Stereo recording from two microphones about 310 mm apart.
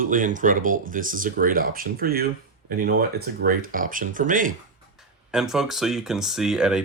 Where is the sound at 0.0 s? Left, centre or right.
Right.